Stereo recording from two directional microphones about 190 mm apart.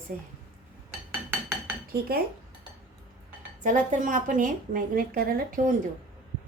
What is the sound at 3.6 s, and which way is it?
A woman's voice, 40° right (ahead or behind).